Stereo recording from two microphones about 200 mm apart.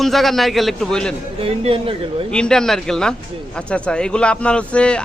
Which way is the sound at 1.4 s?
30° right (ahead or behind).